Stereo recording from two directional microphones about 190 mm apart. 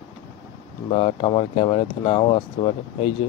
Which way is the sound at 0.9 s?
30° left (ahead or behind).